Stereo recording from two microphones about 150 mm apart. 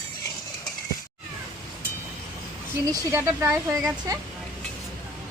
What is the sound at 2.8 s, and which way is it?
Speech, 25° right (ahead or behind).